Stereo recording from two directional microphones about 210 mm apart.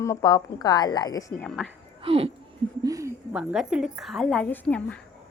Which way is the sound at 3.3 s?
5° right (ahead or behind).